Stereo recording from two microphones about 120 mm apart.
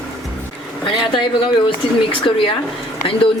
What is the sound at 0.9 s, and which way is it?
A woman's voice, 40° left (ahead or behind).